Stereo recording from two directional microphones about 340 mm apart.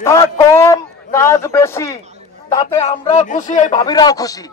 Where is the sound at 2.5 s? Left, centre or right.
Centre.